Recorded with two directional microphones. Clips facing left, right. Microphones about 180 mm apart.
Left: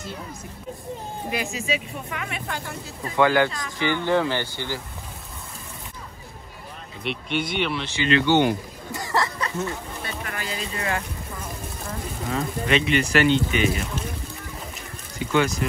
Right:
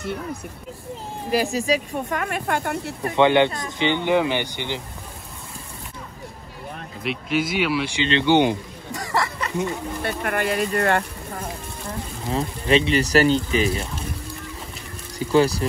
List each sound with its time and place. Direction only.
0.0 s speech: 60° right (ahead or behind)
1.3 s speech: 35° right (ahead or behind); by 3.2 s 65° right (ahead or behind)
3.2 s speech: 25° right (ahead or behind)
7.0 s speech: centre (ahead or behind)
8.0 s speech: 25° right (ahead or behind)
10.0 s speech: 60° right (ahead or behind)
12.3 s speech: 30° right (ahead or behind)
15.1 s speech: 35° right (ahead or behind)